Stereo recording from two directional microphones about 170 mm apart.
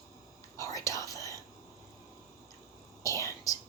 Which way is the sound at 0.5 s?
20° left (ahead or behind).